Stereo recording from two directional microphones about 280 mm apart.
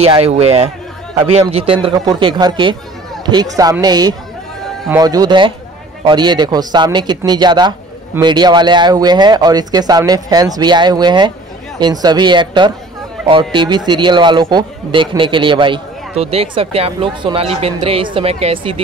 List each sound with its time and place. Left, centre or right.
0.0 s speech: right